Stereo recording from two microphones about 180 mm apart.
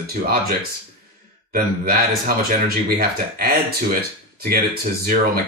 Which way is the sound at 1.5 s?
55° right (ahead or behind).